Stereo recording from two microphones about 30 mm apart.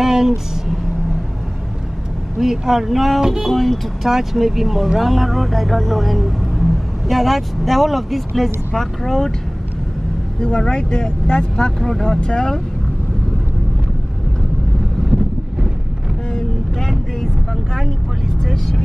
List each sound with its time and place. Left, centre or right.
0.0 s a sound: centre
2.3 s speech: centre
3.2 s speech: centre
3.4 s speech: centre
4.1 s speech: centre
8.7 s speech: centre
10.6 s speech: left
18.4 s speech: centre